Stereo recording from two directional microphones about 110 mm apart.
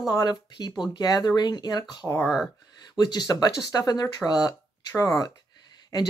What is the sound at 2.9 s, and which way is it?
Speech, 40° left (ahead or behind).